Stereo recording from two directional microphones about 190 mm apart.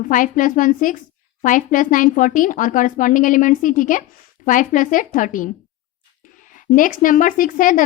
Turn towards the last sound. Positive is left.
turn(degrees=45)  # may be behind; listen again after turning